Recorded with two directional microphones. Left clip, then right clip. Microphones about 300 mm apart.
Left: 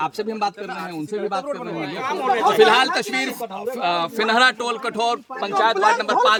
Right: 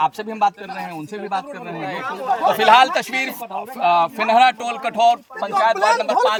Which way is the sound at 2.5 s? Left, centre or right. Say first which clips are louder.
Right 4 dB; centre.